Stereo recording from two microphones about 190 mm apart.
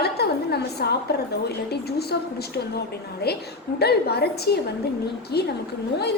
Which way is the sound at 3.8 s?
55° left (ahead or behind).